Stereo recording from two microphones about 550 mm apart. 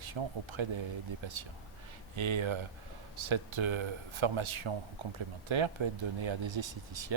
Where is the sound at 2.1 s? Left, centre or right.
Right.